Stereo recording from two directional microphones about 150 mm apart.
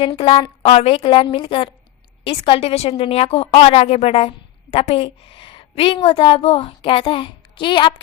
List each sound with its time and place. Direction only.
0.0 s a woman's voice: 40° left (ahead or behind)